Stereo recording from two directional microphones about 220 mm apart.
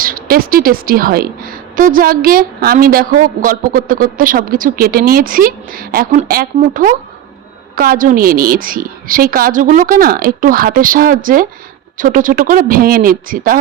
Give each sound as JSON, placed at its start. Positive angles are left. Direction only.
{"t": 0.0, "sound": "a woman's voice", "side_deg": -40}